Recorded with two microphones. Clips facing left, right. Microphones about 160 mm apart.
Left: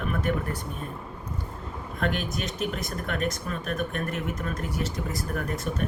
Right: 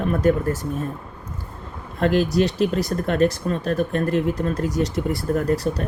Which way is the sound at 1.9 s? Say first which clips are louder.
Right 11 dB; 35° right (ahead or behind).